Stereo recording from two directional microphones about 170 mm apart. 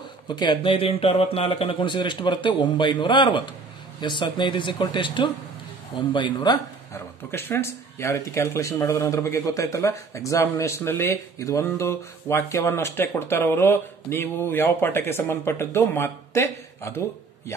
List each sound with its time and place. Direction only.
0.4 s speech: 30° left (ahead or behind)